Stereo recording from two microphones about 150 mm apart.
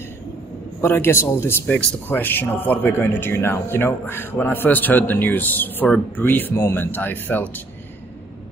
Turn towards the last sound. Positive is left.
turn(degrees=15)  # may be behind; listen again after turning